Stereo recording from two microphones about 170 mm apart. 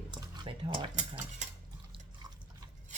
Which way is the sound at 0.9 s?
40° right (ahead or behind).